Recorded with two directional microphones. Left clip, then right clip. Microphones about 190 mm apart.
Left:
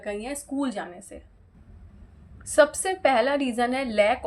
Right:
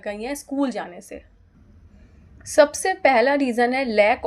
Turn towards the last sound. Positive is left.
turn(degrees=-30)  # may be behind; listen again after turning